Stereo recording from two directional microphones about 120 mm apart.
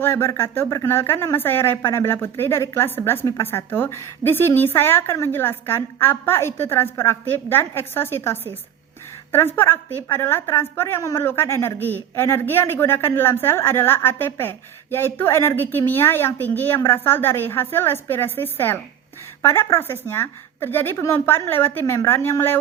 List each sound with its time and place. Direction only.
0.0 s speech: 20° left (ahead or behind)
11.8 s speech: 20° right (ahead or behind)
12.1 s speech: 20° left (ahead or behind)